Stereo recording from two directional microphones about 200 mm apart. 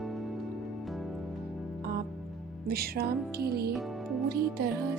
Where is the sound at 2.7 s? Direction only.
50° right (ahead or behind).